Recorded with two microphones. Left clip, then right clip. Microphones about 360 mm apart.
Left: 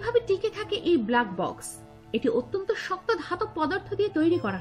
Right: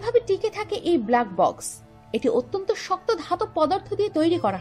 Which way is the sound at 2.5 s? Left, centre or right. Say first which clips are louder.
Right 4 dB; centre.